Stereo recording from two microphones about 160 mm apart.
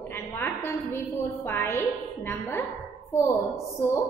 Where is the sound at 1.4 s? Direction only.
15° left (ahead or behind).